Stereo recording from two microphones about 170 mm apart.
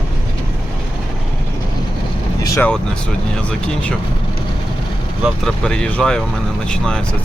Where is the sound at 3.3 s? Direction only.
5° left (ahead or behind).